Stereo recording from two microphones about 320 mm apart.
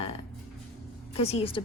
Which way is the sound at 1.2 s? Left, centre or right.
Centre.